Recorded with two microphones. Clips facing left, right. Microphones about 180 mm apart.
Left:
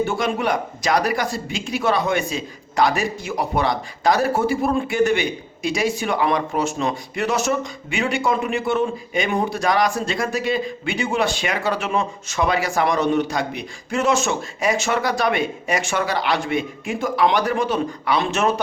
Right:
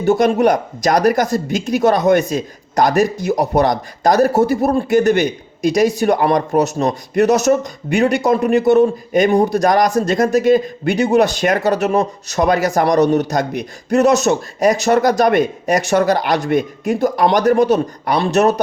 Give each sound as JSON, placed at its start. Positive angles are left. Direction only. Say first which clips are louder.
{"t": 0.0, "sound": "speech", "louder": "right 9 dB", "side_deg": -40}